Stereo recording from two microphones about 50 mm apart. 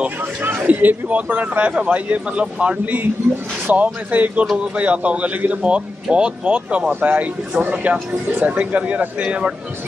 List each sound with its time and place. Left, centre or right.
0.4 s speech: right